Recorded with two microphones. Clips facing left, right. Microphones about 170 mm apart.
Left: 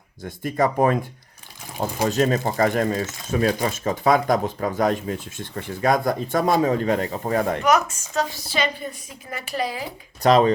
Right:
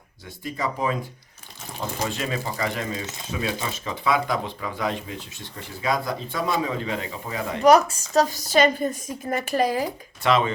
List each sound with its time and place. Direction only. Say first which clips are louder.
0.3 s speech: left 7 dB; 50° left (ahead or behind)
2.0 s speech: left 12 dB; 45° left (ahead or behind)
7.6 s a woman's voice: right 4 dB; 35° right (ahead or behind)
10.2 s speech: left 5 dB; 40° left (ahead or behind)